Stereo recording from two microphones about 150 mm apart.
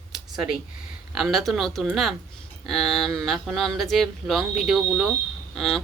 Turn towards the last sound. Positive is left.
turn(degrees=0)  # may be behind; listen again after turning